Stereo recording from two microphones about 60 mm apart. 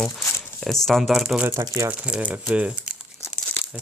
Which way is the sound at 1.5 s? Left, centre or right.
Right.